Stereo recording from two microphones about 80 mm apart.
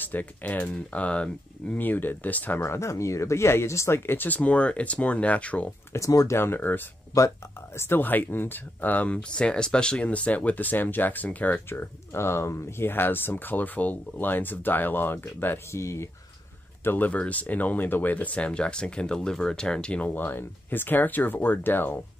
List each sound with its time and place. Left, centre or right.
0.0 s speech: left
5.9 s speech: left
7.2 s speech: left
7.8 s speech: left
16.8 s speech: left